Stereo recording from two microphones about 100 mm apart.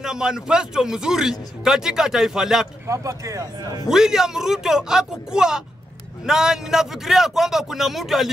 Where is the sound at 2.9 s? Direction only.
30° right (ahead or behind).